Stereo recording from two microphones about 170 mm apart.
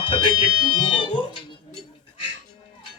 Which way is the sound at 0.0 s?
30° left (ahead or behind).